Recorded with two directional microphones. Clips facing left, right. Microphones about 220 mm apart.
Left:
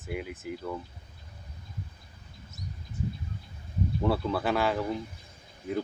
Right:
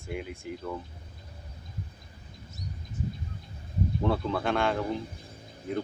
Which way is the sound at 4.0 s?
5° left (ahead or behind).